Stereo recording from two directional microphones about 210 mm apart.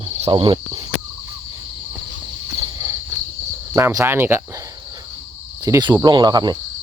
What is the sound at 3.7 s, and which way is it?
Cricket, 10° right (ahead or behind).